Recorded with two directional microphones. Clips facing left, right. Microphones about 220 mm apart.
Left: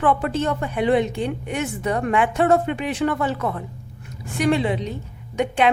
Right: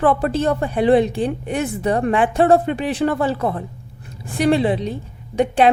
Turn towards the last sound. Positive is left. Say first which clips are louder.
# right 4 dB
turn(degrees=-35)  # may be behind; listen again after turning